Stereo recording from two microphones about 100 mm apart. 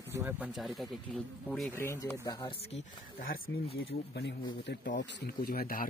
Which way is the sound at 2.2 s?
40° left (ahead or behind).